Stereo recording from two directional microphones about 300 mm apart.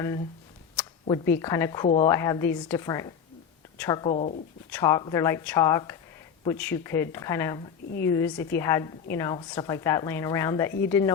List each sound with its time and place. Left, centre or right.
1.0 s a woman's voice: centre
4.7 s a woman's voice: centre